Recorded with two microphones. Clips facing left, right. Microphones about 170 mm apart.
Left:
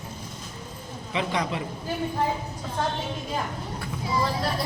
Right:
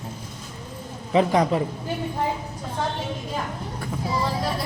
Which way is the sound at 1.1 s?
40° right (ahead or behind).